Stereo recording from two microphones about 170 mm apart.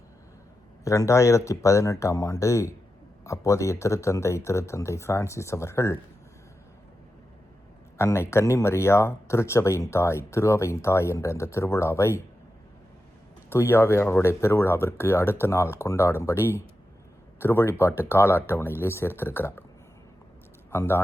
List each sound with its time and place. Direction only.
0.9 s speech: 15° left (ahead or behind)
7.9 s speech: 15° left (ahead or behind)
13.5 s speech: 15° left (ahead or behind)
20.7 s speech: 15° left (ahead or behind)